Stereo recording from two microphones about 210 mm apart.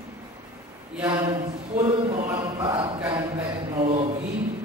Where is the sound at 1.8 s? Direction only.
25° right (ahead or behind).